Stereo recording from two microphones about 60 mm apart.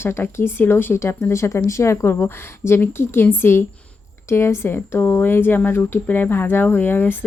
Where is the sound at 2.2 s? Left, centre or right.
Left.